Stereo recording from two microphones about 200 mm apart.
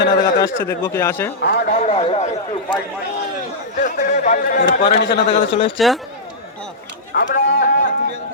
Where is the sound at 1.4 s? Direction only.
50° left (ahead or behind); by 2.2 s 30° left (ahead or behind).